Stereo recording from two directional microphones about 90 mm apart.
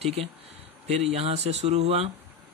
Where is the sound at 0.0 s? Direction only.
90° right.